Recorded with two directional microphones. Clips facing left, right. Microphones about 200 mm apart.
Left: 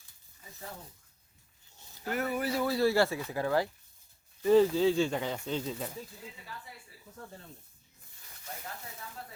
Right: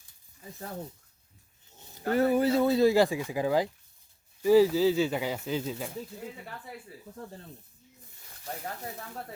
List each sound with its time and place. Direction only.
2.0 s speech: 35° right (ahead or behind); by 5.9 s 5° right (ahead or behind)
6.4 s speech: 60° right (ahead or behind)
8.6 s speech: 55° right (ahead or behind)